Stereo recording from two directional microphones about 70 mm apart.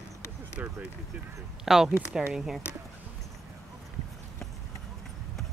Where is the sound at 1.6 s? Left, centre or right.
Centre.